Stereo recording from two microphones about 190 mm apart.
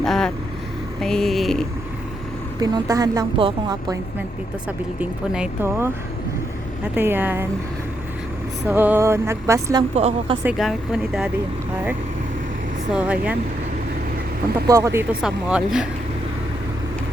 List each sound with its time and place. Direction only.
0.0 s vehicle: 5° left (ahead or behind)
1.0 s speech: centre (ahead or behind)
2.6 s a woman's voice: 20° right (ahead or behind)
4.9 s music: 5° right (ahead or behind)
8.6 s music: 10° right (ahead or behind)
9.9 s a woman's voice: 35° right (ahead or behind)
10.6 s speech: centre (ahead or behind)
12.9 s music: 5° right (ahead or behind)
14.7 s speech: 15° right (ahead or behind)